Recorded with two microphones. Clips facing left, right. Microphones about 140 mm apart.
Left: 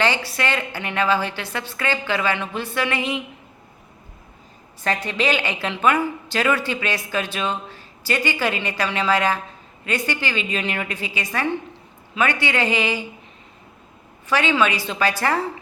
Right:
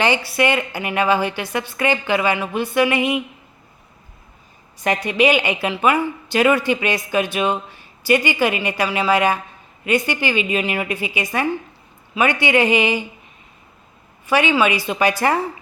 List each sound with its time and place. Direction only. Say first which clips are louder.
0.0 s speech: right 4 dB; 15° right (ahead or behind)
5.0 s speech: right 8 dB; 15° right (ahead or behind)
14.3 s speech: right 3 dB; 10° right (ahead or behind)